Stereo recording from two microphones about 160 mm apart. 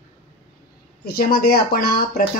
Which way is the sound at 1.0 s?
70° left (ahead or behind).